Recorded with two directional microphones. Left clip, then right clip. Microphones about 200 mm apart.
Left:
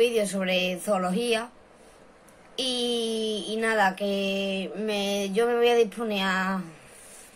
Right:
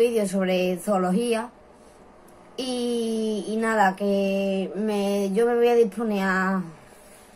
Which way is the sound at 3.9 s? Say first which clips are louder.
Right 4 dB; 50° left (ahead or behind).